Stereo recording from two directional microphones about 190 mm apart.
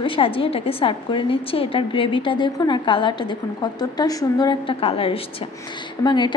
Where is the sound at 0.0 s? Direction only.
25° left (ahead or behind).